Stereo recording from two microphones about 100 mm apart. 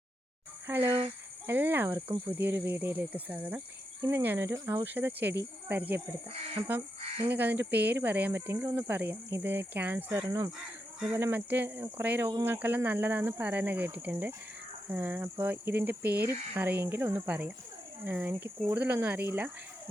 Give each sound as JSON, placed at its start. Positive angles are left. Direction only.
{"t": 0.7, "sound": "speech", "side_deg": -20}
{"t": 10.2, "sound": "speech", "side_deg": -35}
{"t": 11.1, "sound": "speech", "side_deg": -20}